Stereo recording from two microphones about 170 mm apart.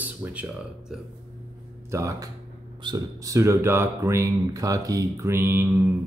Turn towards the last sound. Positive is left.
turn(degrees=-15)  # may be behind; listen again after turning